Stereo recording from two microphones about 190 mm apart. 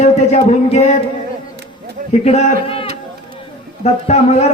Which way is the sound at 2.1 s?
35° left (ahead or behind).